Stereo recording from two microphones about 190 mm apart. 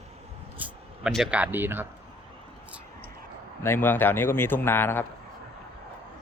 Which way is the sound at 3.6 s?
10° left (ahead or behind).